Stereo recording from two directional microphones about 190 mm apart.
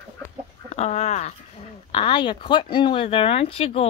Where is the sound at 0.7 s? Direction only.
35° left (ahead or behind).